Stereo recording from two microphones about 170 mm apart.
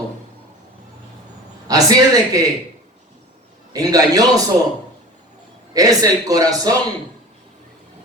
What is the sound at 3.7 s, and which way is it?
Speech, 20° right (ahead or behind).